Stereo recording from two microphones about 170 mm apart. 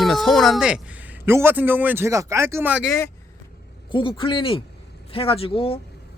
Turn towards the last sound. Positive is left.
turn(degrees=35)  # may be behind; listen again after turning